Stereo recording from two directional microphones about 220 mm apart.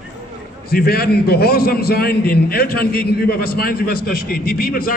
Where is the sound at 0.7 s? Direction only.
45° left (ahead or behind).